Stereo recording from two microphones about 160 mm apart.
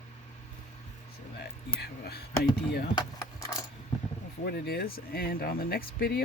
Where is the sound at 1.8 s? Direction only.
80° left.